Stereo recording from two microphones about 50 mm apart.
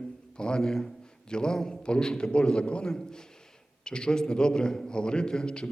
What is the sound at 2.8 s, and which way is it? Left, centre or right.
A man's voice, centre.